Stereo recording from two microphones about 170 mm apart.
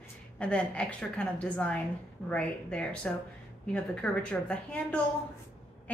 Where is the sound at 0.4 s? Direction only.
5° left (ahead or behind).